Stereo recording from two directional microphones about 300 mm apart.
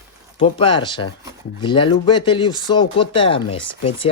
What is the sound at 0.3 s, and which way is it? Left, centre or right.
Speech, centre.